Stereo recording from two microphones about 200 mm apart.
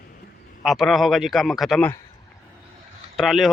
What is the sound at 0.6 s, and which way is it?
Speech, centre (ahead or behind).